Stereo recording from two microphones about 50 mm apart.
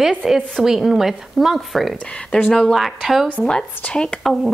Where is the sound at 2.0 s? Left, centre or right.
Left.